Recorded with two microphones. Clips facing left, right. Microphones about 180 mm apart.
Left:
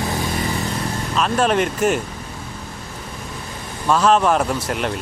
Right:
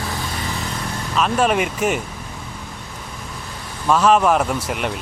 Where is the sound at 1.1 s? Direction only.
5° right (ahead or behind).